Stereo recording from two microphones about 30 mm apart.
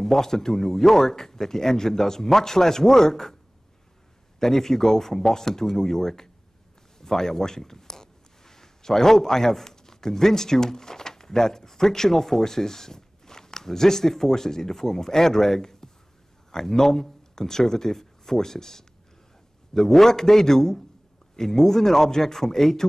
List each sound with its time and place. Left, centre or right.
0.0 s a man's voice: centre
4.4 s a man's voice: centre